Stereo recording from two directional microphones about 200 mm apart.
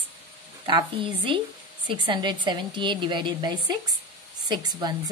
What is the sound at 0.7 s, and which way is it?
A woman's voice, 25° right (ahead or behind).